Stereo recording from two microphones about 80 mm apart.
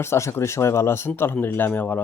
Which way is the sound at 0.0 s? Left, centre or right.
Left.